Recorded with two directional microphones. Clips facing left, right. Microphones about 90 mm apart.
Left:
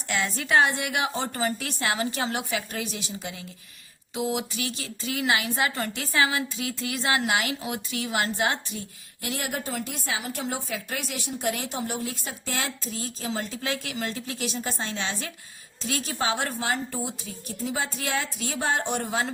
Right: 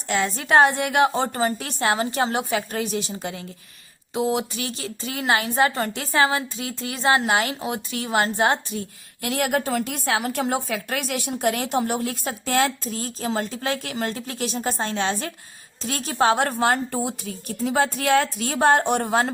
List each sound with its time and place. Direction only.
0.1 s speech: 35° right (ahead or behind)
9.2 s a woman's voice: 60° right (ahead or behind)